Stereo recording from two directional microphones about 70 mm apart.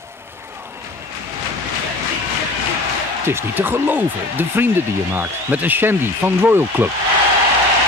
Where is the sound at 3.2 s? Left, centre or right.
Right.